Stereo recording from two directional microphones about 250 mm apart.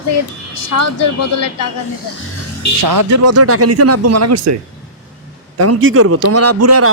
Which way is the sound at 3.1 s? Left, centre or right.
Right.